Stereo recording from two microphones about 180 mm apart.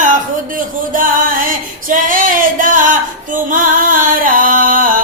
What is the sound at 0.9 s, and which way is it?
Music, 50° right (ahead or behind).